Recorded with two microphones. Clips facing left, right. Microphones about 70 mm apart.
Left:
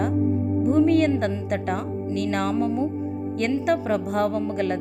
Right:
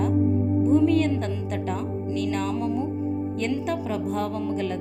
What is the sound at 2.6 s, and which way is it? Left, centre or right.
Speech, left.